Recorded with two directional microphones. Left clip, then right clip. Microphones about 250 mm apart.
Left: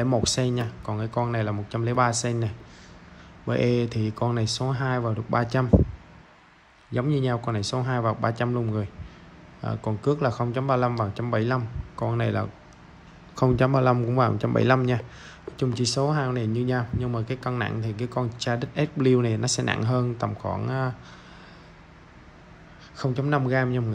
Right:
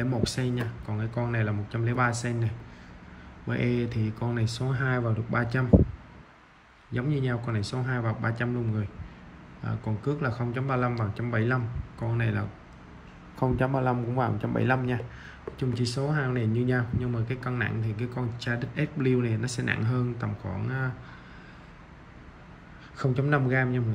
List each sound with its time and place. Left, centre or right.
0.0 s speech: centre
6.9 s speech: centre
13.7 s a man's voice: right
14.6 s speech: centre
22.9 s a man's voice: centre